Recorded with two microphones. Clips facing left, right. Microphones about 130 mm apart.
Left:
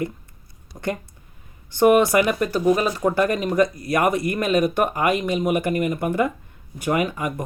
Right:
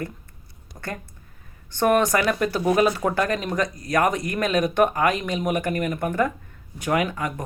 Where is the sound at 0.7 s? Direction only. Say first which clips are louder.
Left 7 dB; 15° left (ahead or behind).